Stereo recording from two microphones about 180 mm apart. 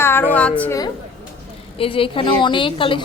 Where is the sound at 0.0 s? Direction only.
10° left (ahead or behind).